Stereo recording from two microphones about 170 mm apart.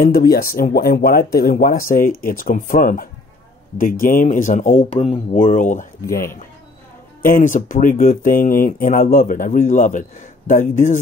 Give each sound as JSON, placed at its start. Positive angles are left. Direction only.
{"t": 0.0, "sound": "speech", "side_deg": 60}
{"t": 7.2, "sound": "speech", "side_deg": 55}